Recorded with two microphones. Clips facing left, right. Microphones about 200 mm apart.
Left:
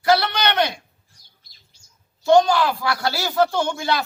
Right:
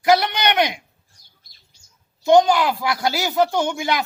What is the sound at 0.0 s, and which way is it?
Speech, 15° right (ahead or behind).